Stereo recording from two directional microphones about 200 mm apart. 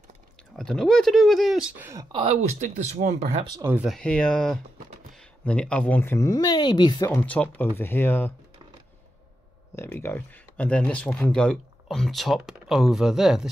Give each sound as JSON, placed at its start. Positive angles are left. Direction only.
{"t": 0.6, "sound": "speech", "side_deg": 0}
{"t": 1.9, "sound": "speech", "side_deg": -15}
{"t": 2.2, "sound": "speech", "side_deg": -35}
{"t": 3.5, "sound": "speech", "side_deg": -15}
{"t": 3.8, "sound": "speech", "side_deg": 5}
{"t": 9.8, "sound": "speech", "side_deg": 10}